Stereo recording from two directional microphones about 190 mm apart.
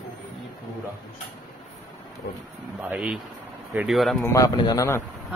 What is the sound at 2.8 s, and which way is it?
Speech, 5° right (ahead or behind).